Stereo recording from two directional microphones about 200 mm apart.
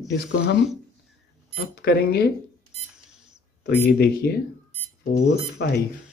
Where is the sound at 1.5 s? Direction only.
50° left (ahead or behind).